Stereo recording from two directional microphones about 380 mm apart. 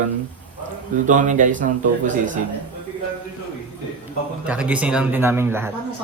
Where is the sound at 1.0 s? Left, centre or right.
Centre.